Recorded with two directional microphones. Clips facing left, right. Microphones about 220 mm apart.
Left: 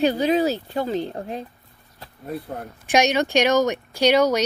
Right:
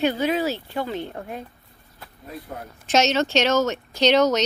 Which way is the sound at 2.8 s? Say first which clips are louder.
Left 1 dB; 15° left (ahead or behind).